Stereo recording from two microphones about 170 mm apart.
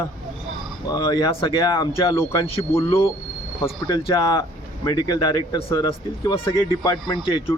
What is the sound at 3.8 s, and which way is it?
Speech, 25° left (ahead or behind).